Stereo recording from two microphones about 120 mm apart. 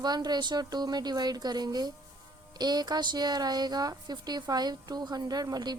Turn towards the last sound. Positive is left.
turn(degrees=-35)  # may be behind; listen again after turning